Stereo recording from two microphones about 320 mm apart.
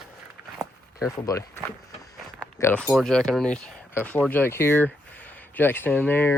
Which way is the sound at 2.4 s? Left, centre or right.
Centre.